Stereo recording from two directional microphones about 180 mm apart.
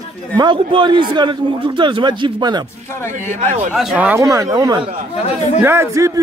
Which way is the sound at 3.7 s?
10° right (ahead or behind).